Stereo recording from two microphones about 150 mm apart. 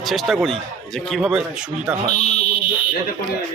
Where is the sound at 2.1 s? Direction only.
50° left (ahead or behind).